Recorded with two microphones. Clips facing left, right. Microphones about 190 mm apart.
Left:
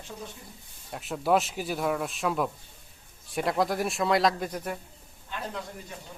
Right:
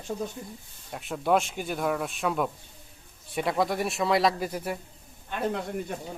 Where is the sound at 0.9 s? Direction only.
Centre (ahead or behind).